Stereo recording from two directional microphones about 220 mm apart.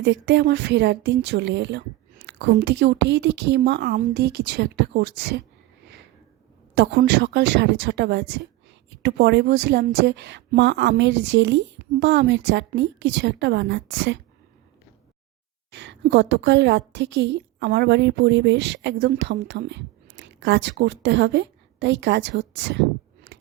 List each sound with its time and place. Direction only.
0.0 s a woman's voice: 55° right (ahead or behind)
6.7 s a woman's voice: 50° right (ahead or behind)
15.7 s a woman's voice: 55° right (ahead or behind)